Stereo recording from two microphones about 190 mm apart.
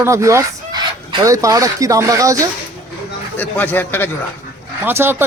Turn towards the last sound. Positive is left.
turn(degrees=-10)  # may be behind; listen again after turning